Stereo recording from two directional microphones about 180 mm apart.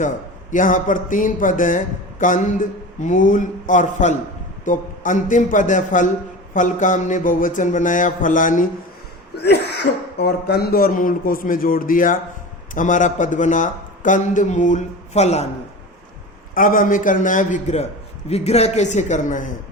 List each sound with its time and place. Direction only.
0.5 s a man's voice: 45° left (ahead or behind)
9.3 s a man's voice: 65° left (ahead or behind); by 15.4 s 40° left (ahead or behind)
16.6 s a man's voice: 50° left (ahead or behind)